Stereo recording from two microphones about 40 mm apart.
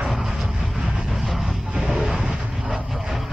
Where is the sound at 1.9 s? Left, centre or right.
Centre.